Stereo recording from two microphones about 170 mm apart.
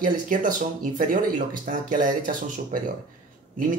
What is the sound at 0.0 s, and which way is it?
Speech, 50° right (ahead or behind).